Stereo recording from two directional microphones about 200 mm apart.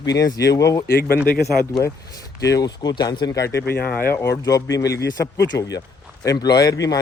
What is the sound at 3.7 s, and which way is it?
Speech, 50° left (ahead or behind).